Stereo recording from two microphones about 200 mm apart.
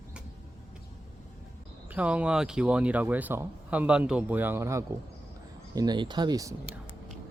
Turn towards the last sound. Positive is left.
turn(degrees=-20)  # may be behind; listen again after turning